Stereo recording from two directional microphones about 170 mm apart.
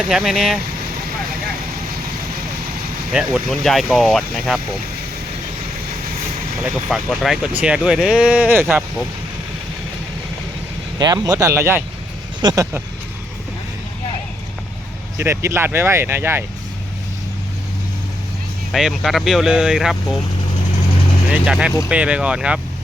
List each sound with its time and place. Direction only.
0.0 s speech: centre (ahead or behind)
3.1 s speech: 5° right (ahead or behind)
6.6 s speech: centre (ahead or behind)
10.9 s speech: 25° right (ahead or behind)
15.2 s speech: 15° right (ahead or behind)
18.7 s speech: centre (ahead or behind)
21.3 s speech: 5° right (ahead or behind)